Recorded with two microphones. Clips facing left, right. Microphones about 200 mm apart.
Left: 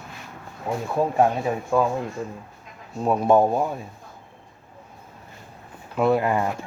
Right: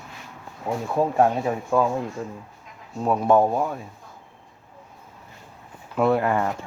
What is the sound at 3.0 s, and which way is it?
Speech, 5° left (ahead or behind).